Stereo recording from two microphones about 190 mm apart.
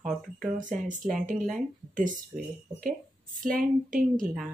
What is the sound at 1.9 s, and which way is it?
Speech, 45° right (ahead or behind).